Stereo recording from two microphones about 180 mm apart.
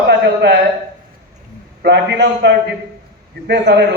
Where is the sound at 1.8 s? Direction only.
75° right (ahead or behind).